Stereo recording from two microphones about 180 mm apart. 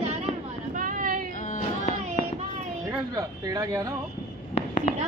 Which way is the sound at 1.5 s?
45° left (ahead or behind).